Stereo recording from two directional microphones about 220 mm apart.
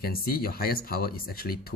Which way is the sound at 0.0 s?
45° left (ahead or behind).